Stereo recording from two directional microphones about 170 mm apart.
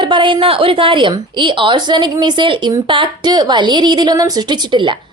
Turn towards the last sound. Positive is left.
turn(degrees=-20)  # may be behind; listen again after turning